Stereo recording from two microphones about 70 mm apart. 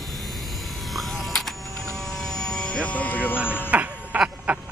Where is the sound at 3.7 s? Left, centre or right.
Right.